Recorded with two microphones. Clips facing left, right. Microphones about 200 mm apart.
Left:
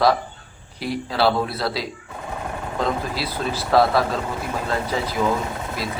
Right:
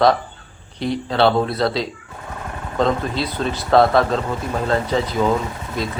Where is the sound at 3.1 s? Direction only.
5° left (ahead or behind).